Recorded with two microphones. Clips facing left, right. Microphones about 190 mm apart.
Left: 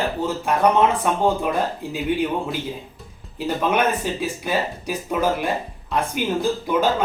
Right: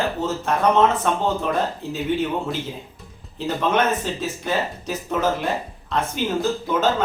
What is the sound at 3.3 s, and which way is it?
Speech, 10° left (ahead or behind).